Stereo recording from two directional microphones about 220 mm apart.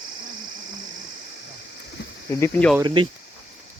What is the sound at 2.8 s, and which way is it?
Speech, 20° right (ahead or behind).